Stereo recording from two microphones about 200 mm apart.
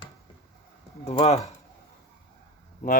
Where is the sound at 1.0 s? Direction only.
30° left (ahead or behind).